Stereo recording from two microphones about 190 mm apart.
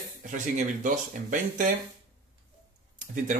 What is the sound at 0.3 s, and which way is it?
Speech, 40° right (ahead or behind).